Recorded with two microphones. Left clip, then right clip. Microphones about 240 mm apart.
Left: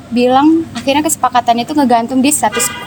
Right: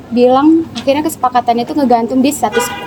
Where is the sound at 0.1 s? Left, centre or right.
Left.